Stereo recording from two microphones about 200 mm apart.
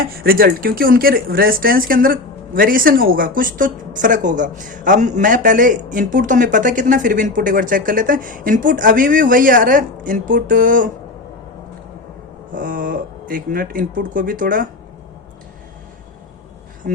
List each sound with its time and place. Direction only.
0.2 s speech: 50° right (ahead or behind)
12.5 s speech: 45° right (ahead or behind)
16.9 s speech: 45° right (ahead or behind)